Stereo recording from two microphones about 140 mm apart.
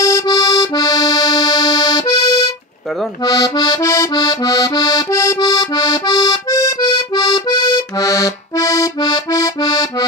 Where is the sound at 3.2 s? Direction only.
30° left (ahead or behind).